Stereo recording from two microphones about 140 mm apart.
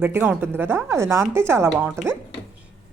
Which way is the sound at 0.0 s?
15° right (ahead or behind).